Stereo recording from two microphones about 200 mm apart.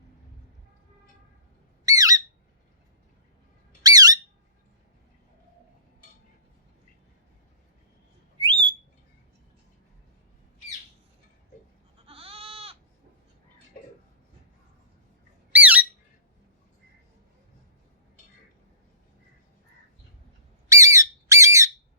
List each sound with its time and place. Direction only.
1.8 s squawk: 15° right (ahead or behind)
3.8 s squawk: 20° right (ahead or behind)
8.4 s whistle: 25° right (ahead or behind)
12.0 s goat: 30° right (ahead or behind)
15.5 s squawk: 10° right (ahead or behind)
20.7 s squawk: 15° right (ahead or behind)